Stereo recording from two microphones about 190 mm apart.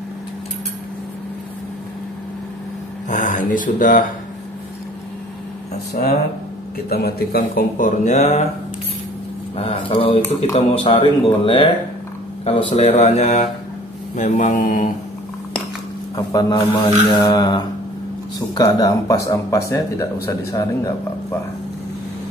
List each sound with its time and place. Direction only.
3.1 s speech: 40° left (ahead or behind)
6.9 s speech: 55° left (ahead or behind); by 8.5 s 40° left (ahead or behind)
9.6 s speech: 30° left (ahead or behind)
16.2 s speech: 20° left (ahead or behind)